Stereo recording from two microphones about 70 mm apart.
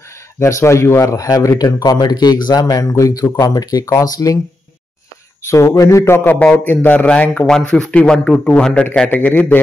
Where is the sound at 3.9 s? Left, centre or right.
Left.